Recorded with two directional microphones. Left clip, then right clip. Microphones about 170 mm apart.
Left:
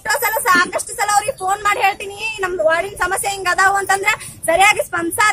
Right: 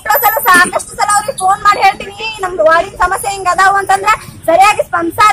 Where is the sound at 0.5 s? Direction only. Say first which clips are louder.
Right 6 dB; 35° left (ahead or behind).